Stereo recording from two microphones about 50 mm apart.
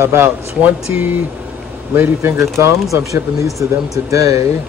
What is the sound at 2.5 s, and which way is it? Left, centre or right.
Speech, right.